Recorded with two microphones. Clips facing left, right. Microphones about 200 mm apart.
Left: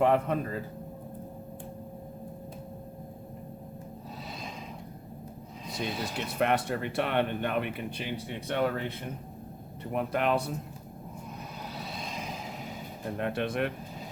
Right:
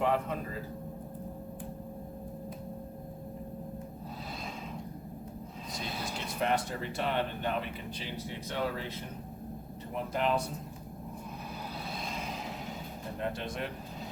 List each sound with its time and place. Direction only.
0.0 s speech: 55° left (ahead or behind)
6.1 s speech: 65° left (ahead or behind)
9.9 s speech: 65° left (ahead or behind)
13.1 s speech: 65° left (ahead or behind)